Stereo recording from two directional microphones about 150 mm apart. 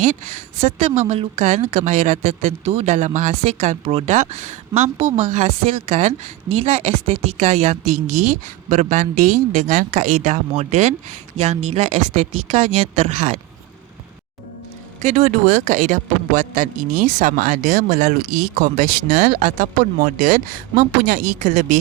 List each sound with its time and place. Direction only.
0.0 s a woman's voice: 50° right (ahead or behind)
15.0 s a man's voice: 55° right (ahead or behind)